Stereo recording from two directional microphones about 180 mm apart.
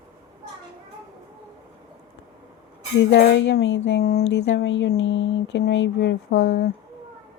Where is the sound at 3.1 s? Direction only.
70° left (ahead or behind).